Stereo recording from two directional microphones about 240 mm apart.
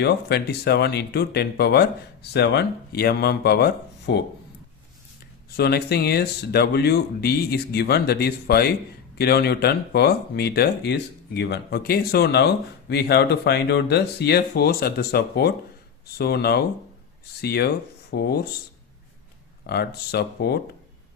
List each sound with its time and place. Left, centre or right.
0.0 s speech: left
5.5 s speech: left
19.6 s speech: left